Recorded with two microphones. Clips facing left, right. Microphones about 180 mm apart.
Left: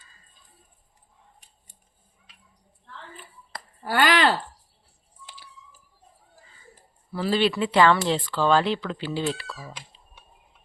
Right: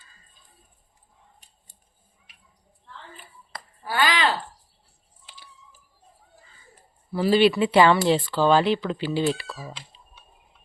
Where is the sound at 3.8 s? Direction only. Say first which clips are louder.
Left 2 dB; 50° left (ahead or behind).